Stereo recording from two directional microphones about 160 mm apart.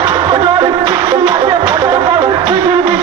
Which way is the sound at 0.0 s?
30° right (ahead or behind).